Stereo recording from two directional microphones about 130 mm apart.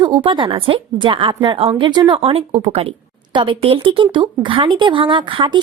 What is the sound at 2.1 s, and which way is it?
Speech, 50° right (ahead or behind).